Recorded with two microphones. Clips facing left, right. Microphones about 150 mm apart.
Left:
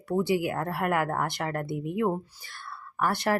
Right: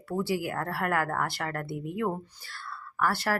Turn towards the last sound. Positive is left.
turn(degrees=20)  # may be behind; listen again after turning